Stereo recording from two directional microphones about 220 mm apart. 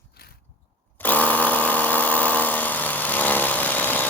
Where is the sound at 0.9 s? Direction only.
10° left (ahead or behind).